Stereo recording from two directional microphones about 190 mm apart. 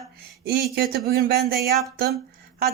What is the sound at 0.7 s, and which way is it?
Speech, 55° right (ahead or behind).